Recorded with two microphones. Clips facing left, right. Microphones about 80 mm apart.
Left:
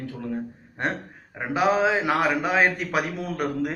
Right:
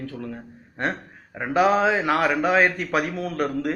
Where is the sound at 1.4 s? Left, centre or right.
Centre.